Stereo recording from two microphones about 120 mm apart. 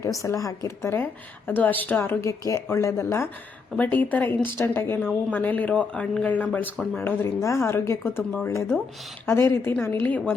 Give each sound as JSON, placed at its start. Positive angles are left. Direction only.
{"t": 0.0, "sound": "speech", "side_deg": 25}
{"t": 3.8, "sound": "a woman's voice", "side_deg": 15}